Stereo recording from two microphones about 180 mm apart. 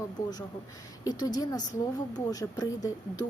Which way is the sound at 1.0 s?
20° left (ahead or behind).